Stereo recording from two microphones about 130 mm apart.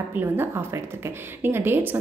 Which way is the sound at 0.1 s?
15° right (ahead or behind).